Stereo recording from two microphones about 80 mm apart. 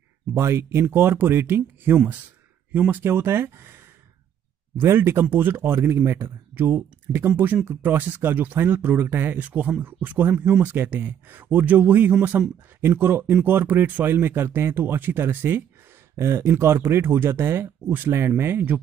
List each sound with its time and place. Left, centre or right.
0.3 s speech: right